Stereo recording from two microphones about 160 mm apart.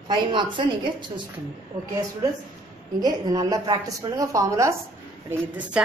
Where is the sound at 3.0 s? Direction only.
20° right (ahead or behind).